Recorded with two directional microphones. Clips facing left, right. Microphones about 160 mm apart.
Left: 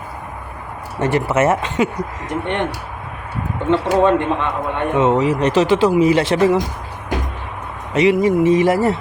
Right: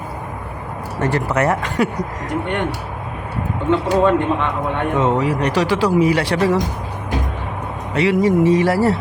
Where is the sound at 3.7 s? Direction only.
20° left (ahead or behind).